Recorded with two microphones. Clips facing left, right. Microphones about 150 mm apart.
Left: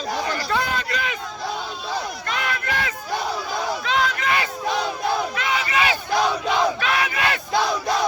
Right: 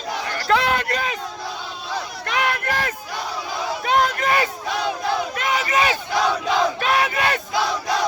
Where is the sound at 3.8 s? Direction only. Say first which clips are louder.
Right 6 dB; 50° right (ahead or behind).